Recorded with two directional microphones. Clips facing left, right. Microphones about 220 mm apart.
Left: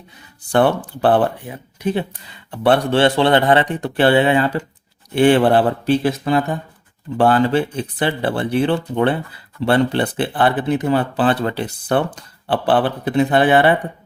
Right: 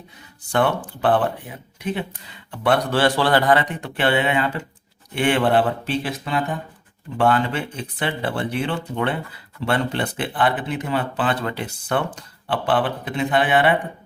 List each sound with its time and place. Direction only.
0.5 s speech: 35° left (ahead or behind)